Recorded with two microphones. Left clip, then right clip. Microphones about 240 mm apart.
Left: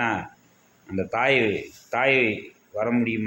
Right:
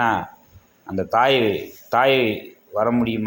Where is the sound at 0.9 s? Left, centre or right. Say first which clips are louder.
Right 4 dB; centre.